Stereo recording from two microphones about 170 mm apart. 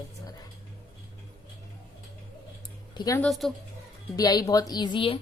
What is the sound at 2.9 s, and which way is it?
Speech, 20° left (ahead or behind).